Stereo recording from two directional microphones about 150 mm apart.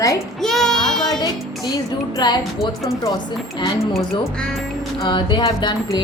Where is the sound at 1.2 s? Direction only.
25° left (ahead or behind).